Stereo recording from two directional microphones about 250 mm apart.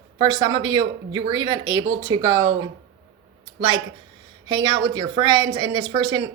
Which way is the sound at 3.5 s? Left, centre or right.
Centre.